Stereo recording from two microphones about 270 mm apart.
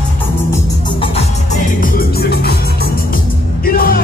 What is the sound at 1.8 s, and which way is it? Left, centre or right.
Music, left.